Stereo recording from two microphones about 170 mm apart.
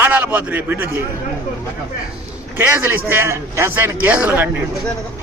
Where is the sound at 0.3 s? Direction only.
10° right (ahead or behind).